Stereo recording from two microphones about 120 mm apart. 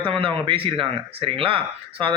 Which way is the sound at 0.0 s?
50° right (ahead or behind).